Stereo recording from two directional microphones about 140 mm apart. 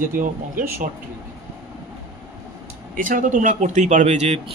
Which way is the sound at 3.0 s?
70° right (ahead or behind).